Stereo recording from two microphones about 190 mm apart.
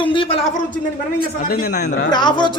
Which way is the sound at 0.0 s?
25° left (ahead or behind).